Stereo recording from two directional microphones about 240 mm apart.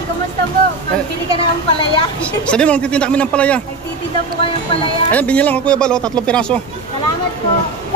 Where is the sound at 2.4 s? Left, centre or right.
Centre.